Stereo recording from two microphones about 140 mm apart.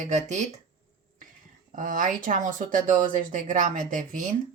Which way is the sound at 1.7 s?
75° right (ahead or behind).